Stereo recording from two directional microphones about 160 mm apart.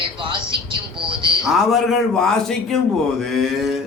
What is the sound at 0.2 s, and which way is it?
A man's voice, 30° right (ahead or behind).